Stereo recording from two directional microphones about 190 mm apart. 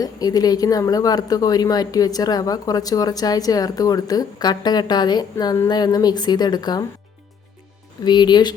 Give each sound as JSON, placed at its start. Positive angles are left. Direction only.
{"t": 0.0, "sound": "speech", "side_deg": 20}
{"t": 8.0, "sound": "speech", "side_deg": 25}